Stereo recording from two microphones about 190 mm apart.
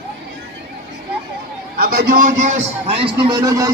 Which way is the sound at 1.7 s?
50° right (ahead or behind).